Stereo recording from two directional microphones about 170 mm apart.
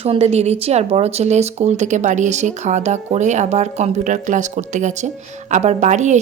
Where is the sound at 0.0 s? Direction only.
35° right (ahead or behind).